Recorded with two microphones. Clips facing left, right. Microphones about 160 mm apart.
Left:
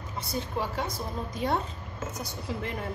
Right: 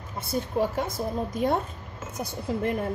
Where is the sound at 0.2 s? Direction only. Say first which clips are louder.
Right 6 dB; 50° right (ahead or behind).